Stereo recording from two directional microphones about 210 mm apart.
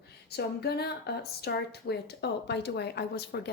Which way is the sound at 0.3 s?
50° left (ahead or behind).